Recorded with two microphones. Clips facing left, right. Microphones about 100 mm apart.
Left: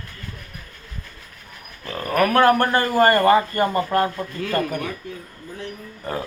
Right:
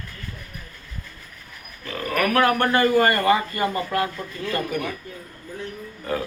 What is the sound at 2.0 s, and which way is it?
Speech, 35° left (ahead or behind).